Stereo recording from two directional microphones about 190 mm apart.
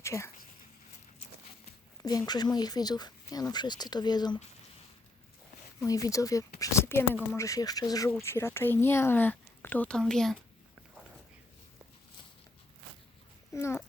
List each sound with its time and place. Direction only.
0.0 s speech: 15° left (ahead or behind)
2.0 s speech: 20° left (ahead or behind)
5.8 s speech: 15° left (ahead or behind); by 10.3 s centre (ahead or behind)
13.5 s speech: 15° left (ahead or behind)